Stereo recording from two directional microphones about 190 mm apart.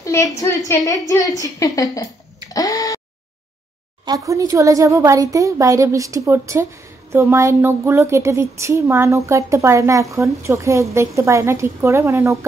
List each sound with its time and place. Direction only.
0.0 s a sound: 15° left (ahead or behind)
0.7 s a woman's voice: 20° left (ahead or behind)
2.5 s tick-tock: 20° left (ahead or behind)
4.0 s speech: 20° right (ahead or behind)